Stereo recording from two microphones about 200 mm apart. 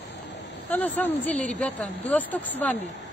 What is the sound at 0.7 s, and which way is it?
Speech, 10° left (ahead or behind).